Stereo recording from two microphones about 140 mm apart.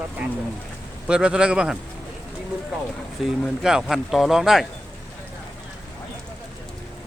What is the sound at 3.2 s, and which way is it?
Speech, 5° right (ahead or behind).